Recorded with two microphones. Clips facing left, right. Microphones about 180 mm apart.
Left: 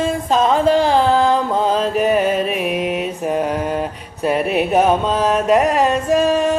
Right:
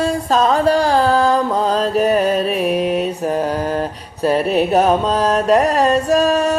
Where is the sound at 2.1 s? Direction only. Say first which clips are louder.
Right 1 dB; 40° right (ahead or behind).